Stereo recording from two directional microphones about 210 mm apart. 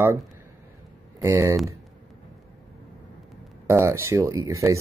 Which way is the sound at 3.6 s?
10° right (ahead or behind).